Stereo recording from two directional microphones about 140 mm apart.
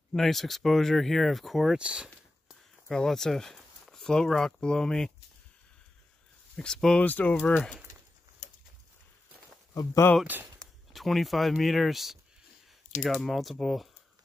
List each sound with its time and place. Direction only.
0.1 s speech: centre (ahead or behind)
6.5 s speech: 5° left (ahead or behind)
9.8 s speech: 20° left (ahead or behind)
10.2 s speech: 15° right (ahead or behind)
10.6 s speech: centre (ahead or behind)